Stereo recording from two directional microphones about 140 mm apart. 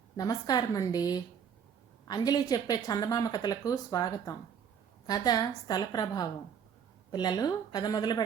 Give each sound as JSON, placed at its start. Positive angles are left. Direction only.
{"t": 0.2, "sound": "speech", "side_deg": 25}